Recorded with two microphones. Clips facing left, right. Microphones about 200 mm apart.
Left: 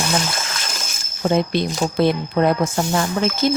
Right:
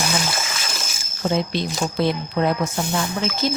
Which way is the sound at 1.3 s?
55° left (ahead or behind).